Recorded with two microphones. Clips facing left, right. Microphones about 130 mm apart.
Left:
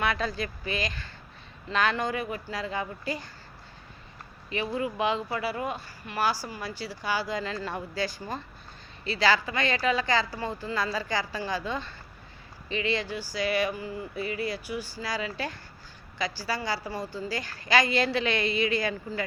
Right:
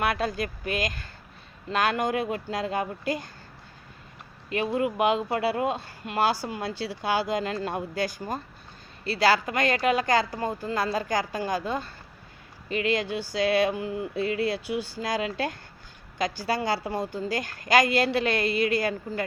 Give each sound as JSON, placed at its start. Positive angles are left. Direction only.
{"t": 0.0, "sound": "speech", "side_deg": -40}
{"t": 2.1, "sound": "speech", "side_deg": -70}
{"t": 4.4, "sound": "speech", "side_deg": -60}
{"t": 13.7, "sound": "speech", "side_deg": -65}